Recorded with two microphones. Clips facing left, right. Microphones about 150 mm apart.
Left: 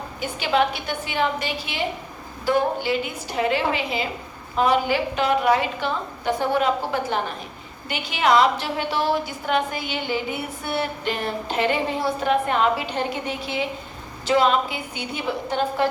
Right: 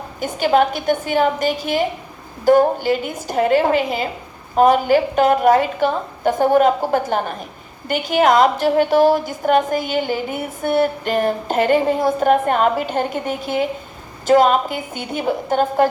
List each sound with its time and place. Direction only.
0.2 s a woman's voice: 45° right (ahead or behind)